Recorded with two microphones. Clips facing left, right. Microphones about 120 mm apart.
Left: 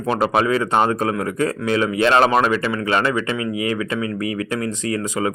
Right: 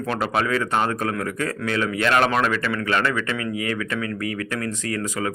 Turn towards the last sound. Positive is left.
turn(degrees=20)  # may be behind; listen again after turning